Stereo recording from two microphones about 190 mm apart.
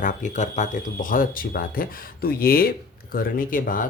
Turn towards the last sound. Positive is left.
turn(degrees=45)  # may be behind; listen again after turning